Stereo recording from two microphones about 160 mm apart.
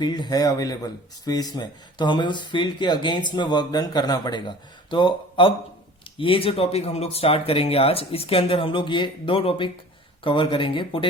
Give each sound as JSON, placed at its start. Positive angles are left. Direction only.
{"t": 0.0, "sound": "speech", "side_deg": 25}